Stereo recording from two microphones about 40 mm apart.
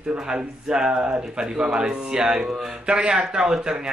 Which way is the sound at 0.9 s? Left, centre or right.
Right.